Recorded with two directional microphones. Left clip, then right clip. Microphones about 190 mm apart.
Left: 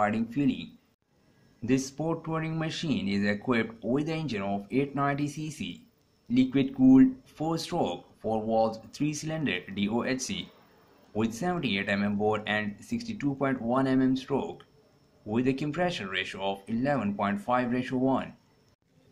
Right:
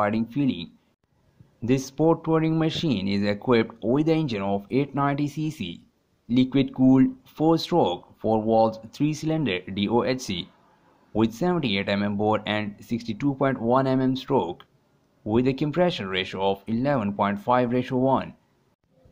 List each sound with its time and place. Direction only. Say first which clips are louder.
0.0 s speech: right 3 dB; 45° right (ahead or behind)
1.7 s speech: right 8 dB; 40° right (ahead or behind)